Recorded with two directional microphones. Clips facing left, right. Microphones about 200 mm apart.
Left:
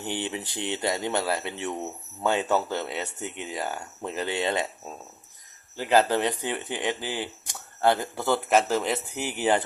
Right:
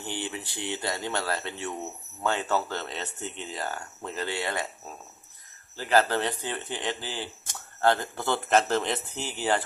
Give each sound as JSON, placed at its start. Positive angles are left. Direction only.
{"t": 0.0, "sound": "speech", "side_deg": 20}
{"t": 5.7, "sound": "speech", "side_deg": 15}